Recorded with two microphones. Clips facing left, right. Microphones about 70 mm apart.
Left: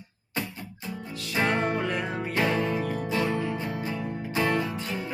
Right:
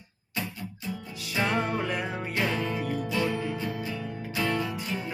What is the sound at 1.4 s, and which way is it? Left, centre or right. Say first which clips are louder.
Music: left 2 dB; left.